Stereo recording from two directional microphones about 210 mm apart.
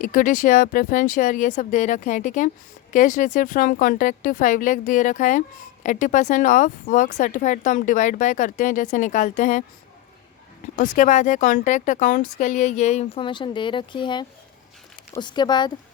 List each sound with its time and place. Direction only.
0.0 s speech: 40° left (ahead or behind)
10.8 s speech: 40° left (ahead or behind); by 15.7 s 20° left (ahead or behind)